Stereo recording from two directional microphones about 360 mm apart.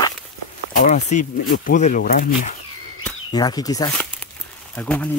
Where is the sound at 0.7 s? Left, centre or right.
Centre.